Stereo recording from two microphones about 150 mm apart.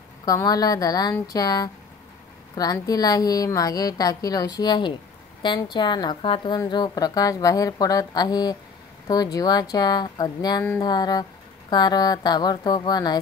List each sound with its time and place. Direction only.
0.2 s a woman's voice: 25° left (ahead or behind)